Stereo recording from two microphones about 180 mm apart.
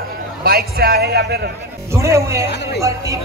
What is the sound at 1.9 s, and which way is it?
Speech, 15° right (ahead or behind).